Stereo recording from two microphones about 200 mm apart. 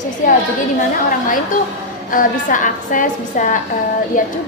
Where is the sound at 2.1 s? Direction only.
40° left (ahead or behind).